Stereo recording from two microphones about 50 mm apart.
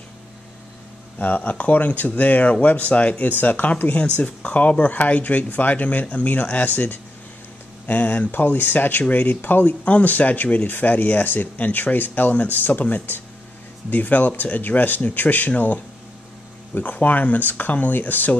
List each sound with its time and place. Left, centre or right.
1.1 s speech: left
8.3 s speech: left